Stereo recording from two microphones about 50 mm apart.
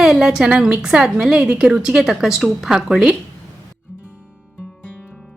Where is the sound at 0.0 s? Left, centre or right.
Centre.